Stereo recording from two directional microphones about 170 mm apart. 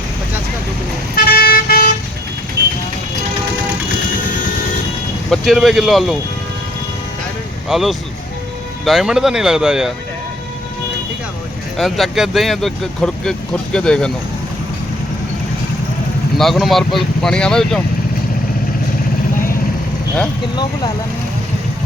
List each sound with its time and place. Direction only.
1.1 s vehicle: 60° left (ahead or behind)
5.3 s speech: centre (ahead or behind)
7.7 s speech: centre (ahead or behind)
11.8 s speech: centre (ahead or behind)
16.4 s speech: centre (ahead or behind)